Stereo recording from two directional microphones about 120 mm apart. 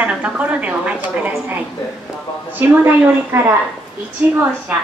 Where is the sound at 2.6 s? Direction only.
20° right (ahead or behind).